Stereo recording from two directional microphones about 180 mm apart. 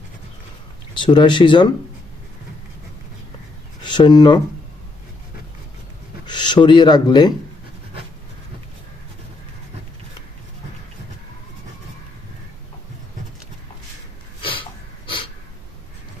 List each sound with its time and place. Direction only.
0.9 s speech: 25° left (ahead or behind)
3.8 s speech: 25° left (ahead or behind)
6.2 s speech: 25° left (ahead or behind)
14.4 s snort: 30° left (ahead or behind)